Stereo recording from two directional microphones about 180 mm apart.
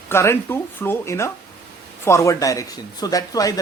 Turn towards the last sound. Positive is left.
turn(degrees=20)  # may be behind; listen again after turning